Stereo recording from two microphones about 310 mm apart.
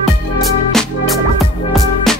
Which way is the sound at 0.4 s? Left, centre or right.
Centre.